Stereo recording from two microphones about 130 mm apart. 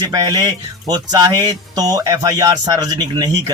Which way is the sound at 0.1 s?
30° right (ahead or behind).